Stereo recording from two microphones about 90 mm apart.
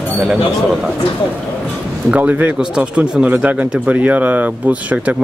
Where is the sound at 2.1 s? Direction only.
15° right (ahead or behind).